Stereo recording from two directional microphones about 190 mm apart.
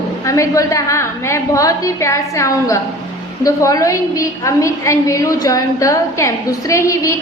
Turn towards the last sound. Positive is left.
turn(degrees=15)  # may be behind; listen again after turning